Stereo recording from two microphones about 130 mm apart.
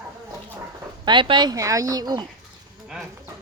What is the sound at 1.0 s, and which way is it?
A woman's voice, 40° right (ahead or behind).